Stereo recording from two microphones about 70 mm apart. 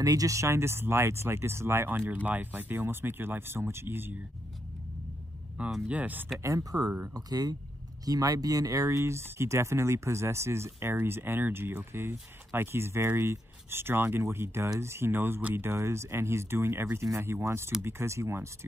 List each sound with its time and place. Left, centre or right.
0.0 s speech: right
5.9 s speech: right
6.4 s speech: right